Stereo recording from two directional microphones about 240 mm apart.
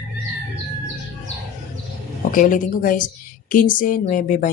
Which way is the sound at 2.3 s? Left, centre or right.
Left.